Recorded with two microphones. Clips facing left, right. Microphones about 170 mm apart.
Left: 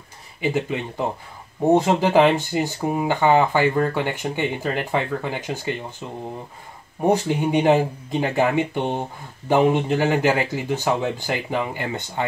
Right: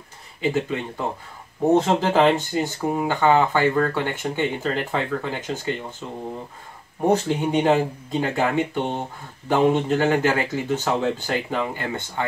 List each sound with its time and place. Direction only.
0.4 s speech: 15° left (ahead or behind)
7.1 s speech: 15° left (ahead or behind)